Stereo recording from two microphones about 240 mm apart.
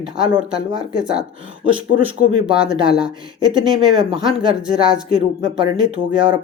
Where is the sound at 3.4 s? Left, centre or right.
Centre.